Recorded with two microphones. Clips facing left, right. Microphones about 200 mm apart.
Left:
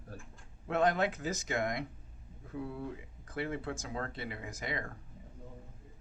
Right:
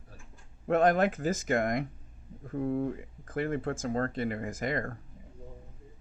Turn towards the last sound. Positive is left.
turn(degrees=-50)  # may be behind; listen again after turning